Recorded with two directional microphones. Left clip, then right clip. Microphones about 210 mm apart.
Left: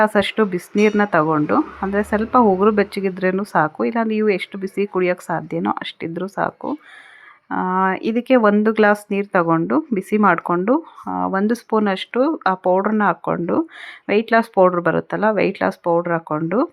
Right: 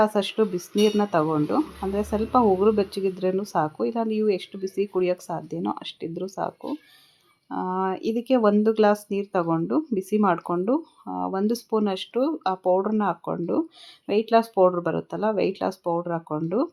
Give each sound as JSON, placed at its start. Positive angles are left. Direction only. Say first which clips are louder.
{"t": 0.0, "sound": "speech", "louder": "left 5 dB", "side_deg": 20}